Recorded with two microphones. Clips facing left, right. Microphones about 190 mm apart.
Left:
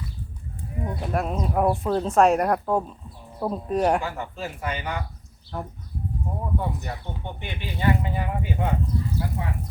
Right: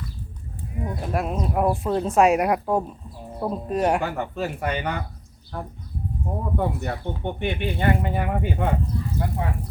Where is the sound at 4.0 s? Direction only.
60° right (ahead or behind).